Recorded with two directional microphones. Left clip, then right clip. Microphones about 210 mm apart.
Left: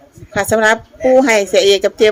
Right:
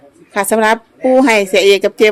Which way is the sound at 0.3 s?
15° right (ahead or behind).